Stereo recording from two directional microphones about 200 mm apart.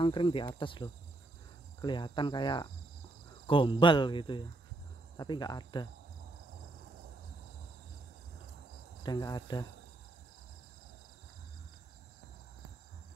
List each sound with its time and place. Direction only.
0.0 s speech: 25° left (ahead or behind)
9.0 s speech: 20° left (ahead or behind)